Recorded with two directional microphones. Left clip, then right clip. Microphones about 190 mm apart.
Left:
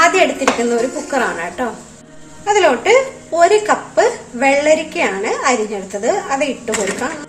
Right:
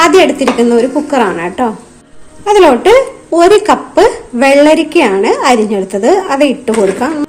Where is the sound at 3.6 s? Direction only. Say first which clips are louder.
Right 6 dB; 50° right (ahead or behind).